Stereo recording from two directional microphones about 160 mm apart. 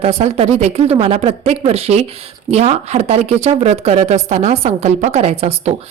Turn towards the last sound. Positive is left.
turn(degrees=-40)  # may be behind; listen again after turning